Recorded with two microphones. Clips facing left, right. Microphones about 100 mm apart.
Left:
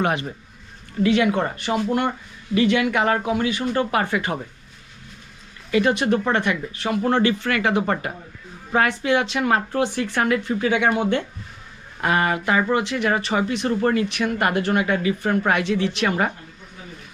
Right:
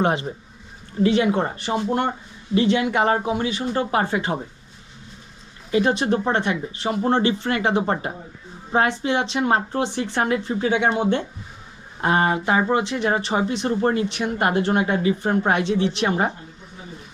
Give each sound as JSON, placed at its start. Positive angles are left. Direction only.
{"t": 0.0, "sound": "speech", "side_deg": -20}
{"t": 6.0, "sound": "speech", "side_deg": -20}